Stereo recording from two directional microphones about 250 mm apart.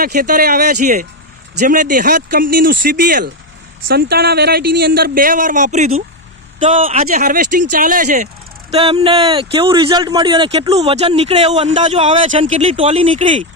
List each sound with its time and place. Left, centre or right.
0.0 s a man's voice: right